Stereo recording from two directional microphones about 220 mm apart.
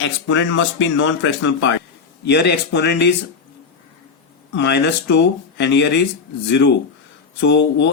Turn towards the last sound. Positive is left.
turn(degrees=55)  # may be behind; listen again after turning